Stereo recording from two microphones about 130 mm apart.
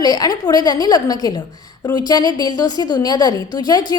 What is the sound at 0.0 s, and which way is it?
A woman's voice, 30° left (ahead or behind).